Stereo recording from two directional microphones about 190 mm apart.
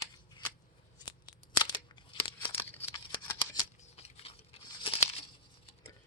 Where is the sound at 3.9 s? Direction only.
30° left (ahead or behind).